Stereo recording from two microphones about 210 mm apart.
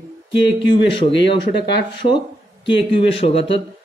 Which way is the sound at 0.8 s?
25° left (ahead or behind).